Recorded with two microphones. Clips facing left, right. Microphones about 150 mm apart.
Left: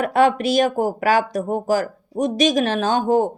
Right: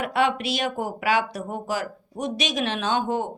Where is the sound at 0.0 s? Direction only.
45° left (ahead or behind).